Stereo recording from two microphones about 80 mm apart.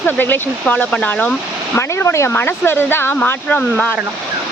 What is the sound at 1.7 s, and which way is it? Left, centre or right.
Speech, left.